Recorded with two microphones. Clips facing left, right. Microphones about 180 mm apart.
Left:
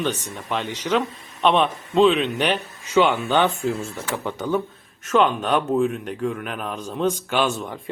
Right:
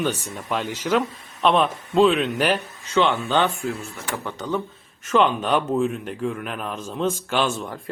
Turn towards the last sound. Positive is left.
turn(degrees=5)  # may be behind; listen again after turning